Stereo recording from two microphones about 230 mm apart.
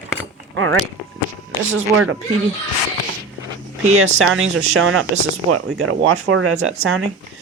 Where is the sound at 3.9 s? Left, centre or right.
Right.